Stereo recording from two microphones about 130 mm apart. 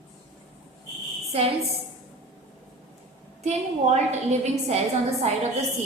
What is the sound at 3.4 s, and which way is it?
A woman's voice, 60° right (ahead or behind).